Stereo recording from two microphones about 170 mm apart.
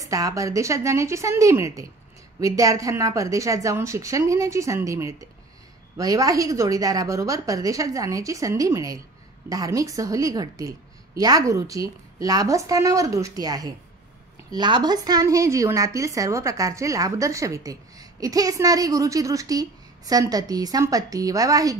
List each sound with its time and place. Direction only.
0.0 s a woman's voice: 20° right (ahead or behind)